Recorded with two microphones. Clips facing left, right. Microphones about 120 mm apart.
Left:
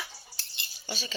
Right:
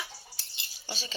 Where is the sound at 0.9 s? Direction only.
35° right (ahead or behind).